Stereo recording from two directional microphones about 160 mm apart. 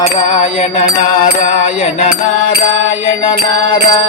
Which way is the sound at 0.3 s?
40° left (ahead or behind).